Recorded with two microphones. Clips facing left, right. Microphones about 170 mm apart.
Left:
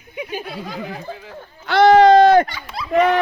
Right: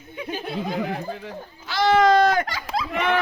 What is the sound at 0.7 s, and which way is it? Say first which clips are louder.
Speech: right 3 dB; 55° right (ahead or behind).